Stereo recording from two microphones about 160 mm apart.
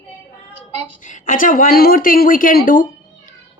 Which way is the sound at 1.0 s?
55° left (ahead or behind).